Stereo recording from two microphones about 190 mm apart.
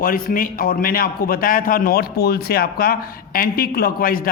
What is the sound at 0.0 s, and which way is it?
A man's voice, 45° left (ahead or behind).